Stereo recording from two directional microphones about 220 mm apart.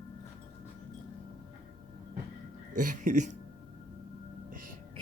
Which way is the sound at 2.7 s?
35° right (ahead or behind).